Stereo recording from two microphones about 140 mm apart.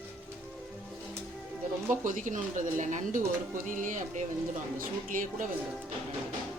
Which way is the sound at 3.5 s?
70° right (ahead or behind).